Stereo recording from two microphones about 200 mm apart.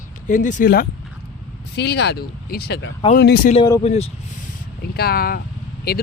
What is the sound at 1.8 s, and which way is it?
Speech, 55° left (ahead or behind).